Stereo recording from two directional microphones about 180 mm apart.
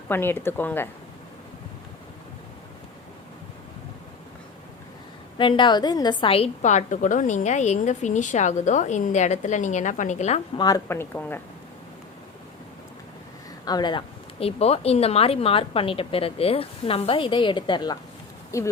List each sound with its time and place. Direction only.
0.1 s a woman's voice: 10° left (ahead or behind)
5.4 s a woman's voice: 25° left (ahead or behind)
10.6 s a woman's voice: 15° left (ahead or behind)
13.7 s a woman's voice: 25° left (ahead or behind)